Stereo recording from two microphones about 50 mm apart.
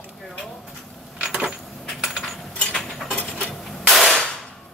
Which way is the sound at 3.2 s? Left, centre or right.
Left.